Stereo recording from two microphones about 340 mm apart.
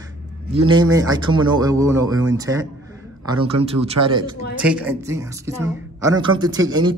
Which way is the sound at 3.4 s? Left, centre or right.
Right.